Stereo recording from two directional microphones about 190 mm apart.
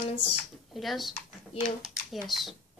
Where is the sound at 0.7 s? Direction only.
Centre (ahead or behind).